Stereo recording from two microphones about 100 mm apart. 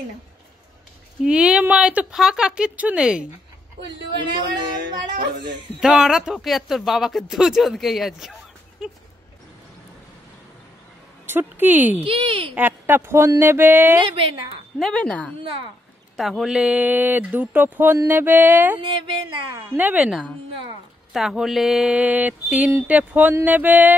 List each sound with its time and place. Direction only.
1.2 s speech: 10° right (ahead or behind)
5.8 s speech: 5° right (ahead or behind)
11.2 s speech: 20° right (ahead or behind)
12.0 s speech: 65° right (ahead or behind)
12.5 s speech: 20° right (ahead or behind)
13.4 s a sound: 25° right (ahead or behind)
14.0 s speech: 65° right (ahead or behind)
14.8 s speech: 5° left (ahead or behind)
16.2 s speech: centre (ahead or behind); by 17.9 s 20° right (ahead or behind)
18.0 s a sound: 20° right (ahead or behind)
18.8 s speech: 55° right (ahead or behind)
19.7 s speech: 15° right (ahead or behind)
20.1 s speech: centre (ahead or behind); by 24.0 s 15° right (ahead or behind)